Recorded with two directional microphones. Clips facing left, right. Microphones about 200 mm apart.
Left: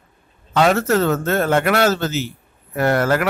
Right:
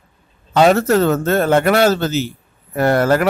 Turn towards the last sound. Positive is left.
turn(degrees=-35)  # may be behind; listen again after turning